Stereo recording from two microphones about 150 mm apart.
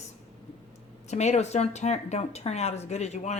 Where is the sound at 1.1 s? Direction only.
50° left (ahead or behind).